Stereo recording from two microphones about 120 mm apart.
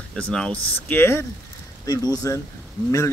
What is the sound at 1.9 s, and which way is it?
Speech, 30° left (ahead or behind).